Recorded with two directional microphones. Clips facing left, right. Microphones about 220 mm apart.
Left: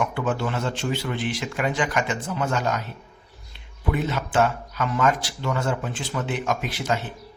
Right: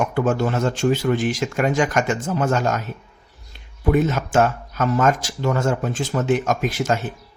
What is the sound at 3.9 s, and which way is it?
A man's voice, 45° right (ahead or behind).